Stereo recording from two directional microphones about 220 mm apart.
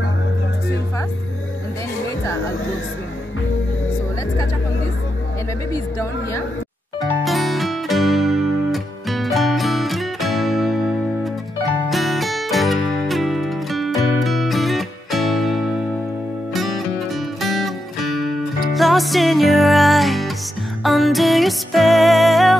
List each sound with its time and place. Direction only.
5.7 s speech: 15° left (ahead or behind)
7.0 s music: centre (ahead or behind)